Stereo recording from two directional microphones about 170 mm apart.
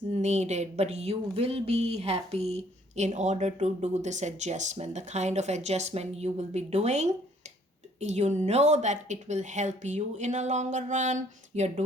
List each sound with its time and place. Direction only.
0.1 s speech: 40° right (ahead or behind)